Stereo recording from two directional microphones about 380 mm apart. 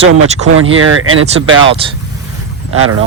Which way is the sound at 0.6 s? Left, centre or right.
Right.